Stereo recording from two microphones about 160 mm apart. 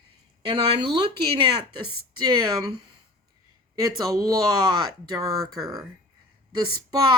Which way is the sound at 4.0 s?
20° right (ahead or behind).